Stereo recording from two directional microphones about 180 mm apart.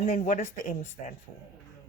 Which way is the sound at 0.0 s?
50° left (ahead or behind).